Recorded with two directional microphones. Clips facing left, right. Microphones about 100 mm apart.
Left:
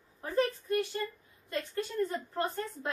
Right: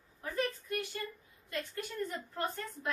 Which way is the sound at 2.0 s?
40° left (ahead or behind).